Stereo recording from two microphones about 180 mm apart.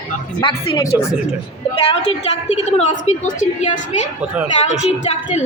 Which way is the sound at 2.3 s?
40° left (ahead or behind).